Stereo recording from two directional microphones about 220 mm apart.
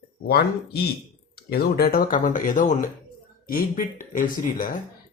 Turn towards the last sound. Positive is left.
turn(degrees=40)  # may be behind; listen again after turning